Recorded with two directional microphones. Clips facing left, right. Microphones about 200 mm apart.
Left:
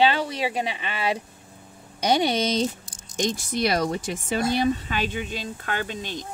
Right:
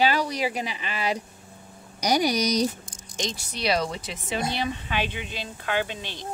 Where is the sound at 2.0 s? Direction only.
25° left (ahead or behind).